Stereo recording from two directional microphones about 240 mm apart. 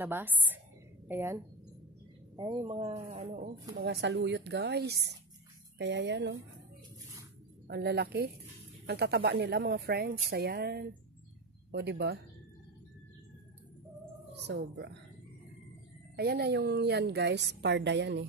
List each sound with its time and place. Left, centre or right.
0.0 s a woman's voice: centre; by 3.4 s right
3.7 s a woman's voice: right
7.6 s a woman's voice: right
14.5 s a woman's voice: right
16.2 s a woman's voice: right